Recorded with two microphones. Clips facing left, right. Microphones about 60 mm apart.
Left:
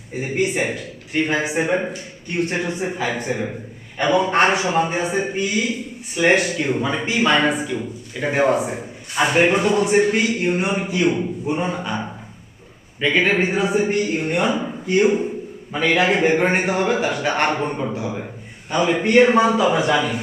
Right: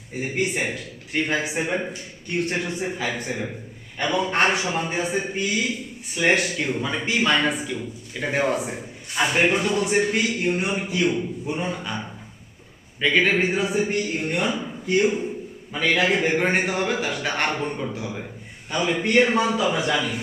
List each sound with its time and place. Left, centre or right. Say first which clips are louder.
0.2 s a man's voice: left 4 dB; centre
16.4 s a man's voice: left 4 dB; centre